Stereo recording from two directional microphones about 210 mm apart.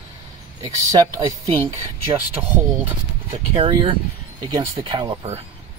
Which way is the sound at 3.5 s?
25° right (ahead or behind).